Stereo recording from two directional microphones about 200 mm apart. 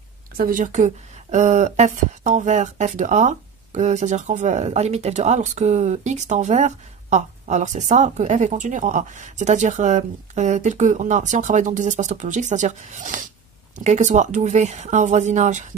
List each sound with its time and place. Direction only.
0.4 s speech: 45° right (ahead or behind)